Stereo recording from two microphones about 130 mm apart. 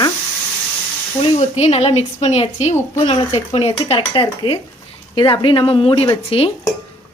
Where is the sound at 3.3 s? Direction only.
45° left (ahead or behind).